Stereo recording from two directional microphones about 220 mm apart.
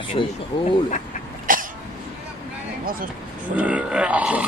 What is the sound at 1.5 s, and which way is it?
Cough, 40° right (ahead or behind).